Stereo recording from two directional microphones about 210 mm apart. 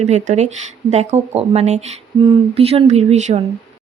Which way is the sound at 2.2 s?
30° right (ahead or behind).